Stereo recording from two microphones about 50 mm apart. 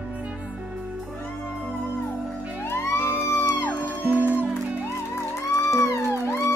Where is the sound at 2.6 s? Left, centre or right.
Left.